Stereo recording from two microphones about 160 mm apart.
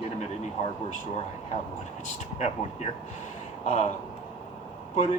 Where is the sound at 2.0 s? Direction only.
45° left (ahead or behind).